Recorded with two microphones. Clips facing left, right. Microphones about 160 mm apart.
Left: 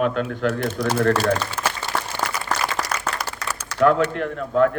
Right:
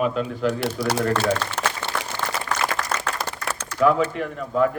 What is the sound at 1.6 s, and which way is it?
Applause, 70° right (ahead or behind).